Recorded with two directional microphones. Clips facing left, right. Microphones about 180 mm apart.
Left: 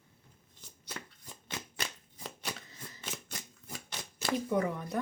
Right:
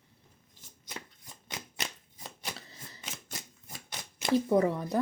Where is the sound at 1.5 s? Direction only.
20° right (ahead or behind).